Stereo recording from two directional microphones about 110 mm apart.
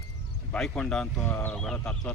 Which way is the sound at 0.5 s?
10° left (ahead or behind).